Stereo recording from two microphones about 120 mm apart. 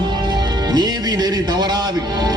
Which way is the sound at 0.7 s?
35° right (ahead or behind).